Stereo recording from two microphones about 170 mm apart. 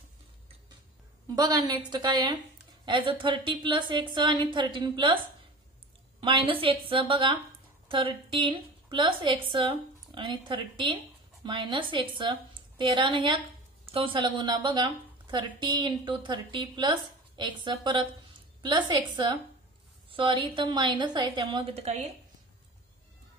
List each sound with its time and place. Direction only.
1.3 s a woman's voice: 25° right (ahead or behind)
6.2 s a woman's voice: 30° right (ahead or behind)